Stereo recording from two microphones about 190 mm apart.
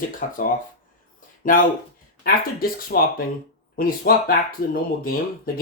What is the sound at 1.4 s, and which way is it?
Speech, 45° left (ahead or behind).